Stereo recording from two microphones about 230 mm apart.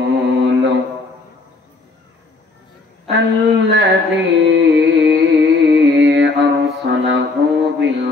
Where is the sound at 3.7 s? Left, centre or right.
Right.